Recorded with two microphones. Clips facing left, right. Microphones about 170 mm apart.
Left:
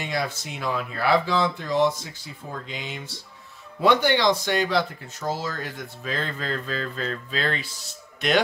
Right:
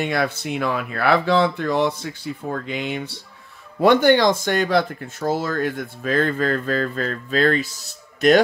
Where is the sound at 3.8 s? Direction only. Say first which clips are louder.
Right 5 dB; 50° right (ahead or behind).